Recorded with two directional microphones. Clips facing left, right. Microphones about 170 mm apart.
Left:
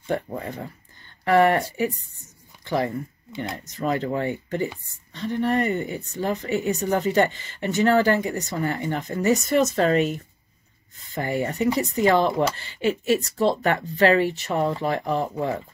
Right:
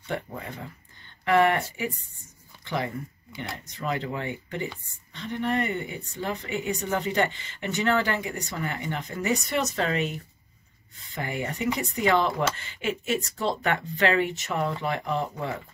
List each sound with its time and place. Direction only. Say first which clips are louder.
0.0 s speech: left 6 dB; 40° left (ahead or behind)
11.1 s speech: left 6 dB; 35° left (ahead or behind)